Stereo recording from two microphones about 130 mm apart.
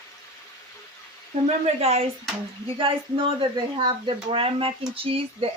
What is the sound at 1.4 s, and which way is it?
Speech, 55° right (ahead or behind).